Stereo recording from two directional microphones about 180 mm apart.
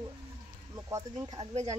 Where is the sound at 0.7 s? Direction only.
20° right (ahead or behind).